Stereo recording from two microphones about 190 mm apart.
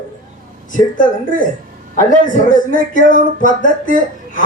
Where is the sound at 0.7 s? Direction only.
45° left (ahead or behind).